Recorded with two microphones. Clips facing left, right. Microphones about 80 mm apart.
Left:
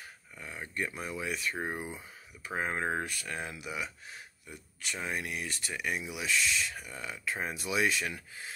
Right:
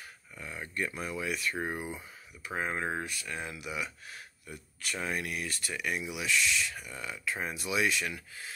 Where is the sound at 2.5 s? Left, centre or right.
Left.